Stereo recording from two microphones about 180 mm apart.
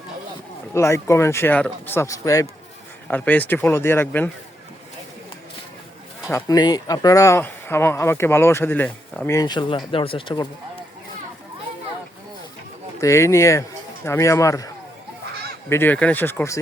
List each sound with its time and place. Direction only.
0.7 s speech: 15° left (ahead or behind)
6.2 s speech: 20° left (ahead or behind)
13.0 s speech: 15° left (ahead or behind)
15.7 s speech: 10° left (ahead or behind)